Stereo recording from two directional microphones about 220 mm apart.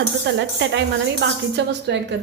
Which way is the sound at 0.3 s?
55° right (ahead or behind).